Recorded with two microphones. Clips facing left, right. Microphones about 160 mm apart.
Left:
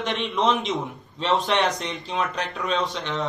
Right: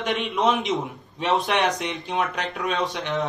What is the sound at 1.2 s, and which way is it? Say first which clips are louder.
Speech: even; 15° right (ahead or behind).